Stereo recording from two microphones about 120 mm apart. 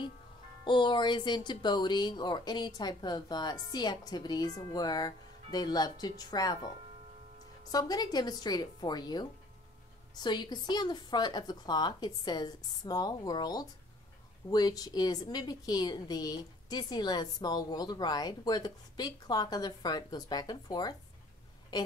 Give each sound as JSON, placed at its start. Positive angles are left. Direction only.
{"t": 0.7, "sound": "a woman's voice", "side_deg": 40}
{"t": 7.7, "sound": "a woman's voice", "side_deg": 35}